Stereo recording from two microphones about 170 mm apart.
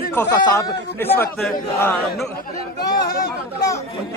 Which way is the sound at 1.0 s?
10° left (ahead or behind).